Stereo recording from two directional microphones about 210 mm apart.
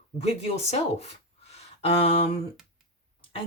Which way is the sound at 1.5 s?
30° left (ahead or behind).